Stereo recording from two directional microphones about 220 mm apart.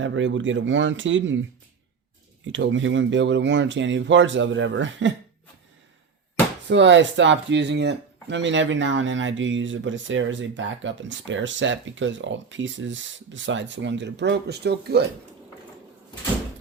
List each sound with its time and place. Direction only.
0.0 s speech: 55° right (ahead or behind)
6.7 s speech: 55° right (ahead or behind)